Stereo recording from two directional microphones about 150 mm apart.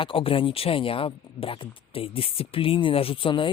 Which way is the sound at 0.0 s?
35° left (ahead or behind).